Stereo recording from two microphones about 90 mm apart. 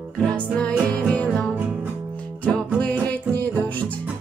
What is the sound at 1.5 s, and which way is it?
Music, 20° right (ahead or behind).